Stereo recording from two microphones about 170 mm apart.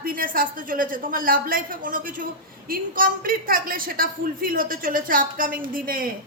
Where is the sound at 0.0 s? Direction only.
55° right (ahead or behind).